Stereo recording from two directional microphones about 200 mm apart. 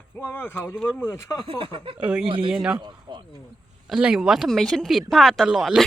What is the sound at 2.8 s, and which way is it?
Speech, 20° right (ahead or behind).